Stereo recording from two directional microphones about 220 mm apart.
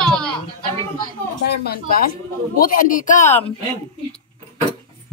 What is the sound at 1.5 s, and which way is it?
Speech, 45° left (ahead or behind).